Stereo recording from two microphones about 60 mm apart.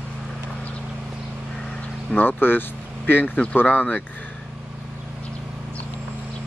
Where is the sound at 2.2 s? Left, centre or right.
Left.